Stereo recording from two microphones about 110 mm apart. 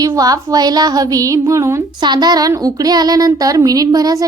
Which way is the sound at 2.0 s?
40° right (ahead or behind).